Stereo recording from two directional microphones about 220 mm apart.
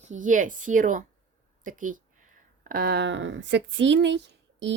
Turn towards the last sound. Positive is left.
turn(degrees=-55)  # may be behind; listen again after turning